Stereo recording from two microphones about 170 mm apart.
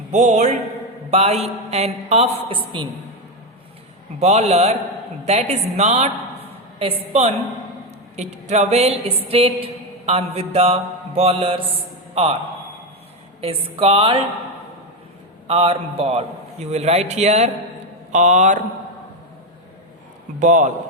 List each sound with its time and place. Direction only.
0.1 s mantra: 45° right (ahead or behind)
1.1 s a man's voice: 40° right (ahead or behind)
4.2 s a man's voice: 40° right (ahead or behind)
13.4 s a man's voice: 35° right (ahead or behind)
15.4 s a man's voice: 35° right (ahead or behind)
18.1 s mantra: 45° right (ahead or behind)
20.4 s mantra: 45° right (ahead or behind)